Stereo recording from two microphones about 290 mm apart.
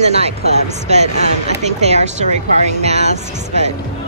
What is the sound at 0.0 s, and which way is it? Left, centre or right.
Speech, right.